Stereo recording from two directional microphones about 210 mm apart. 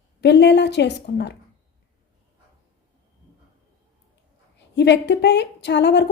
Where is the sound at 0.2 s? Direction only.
55° left (ahead or behind).